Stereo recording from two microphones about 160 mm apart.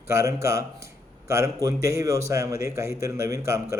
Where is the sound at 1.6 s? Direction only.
20° right (ahead or behind).